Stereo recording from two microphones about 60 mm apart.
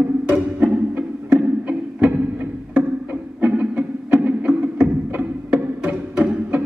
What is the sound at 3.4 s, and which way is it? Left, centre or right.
Music, right.